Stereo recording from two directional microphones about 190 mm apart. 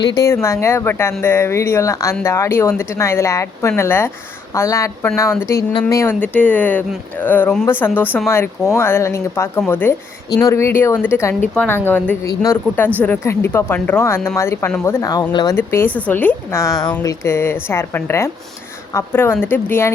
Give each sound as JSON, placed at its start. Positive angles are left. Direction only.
{"t": 0.0, "sound": "speech", "side_deg": 20}
{"t": 15.5, "sound": "speech", "side_deg": 10}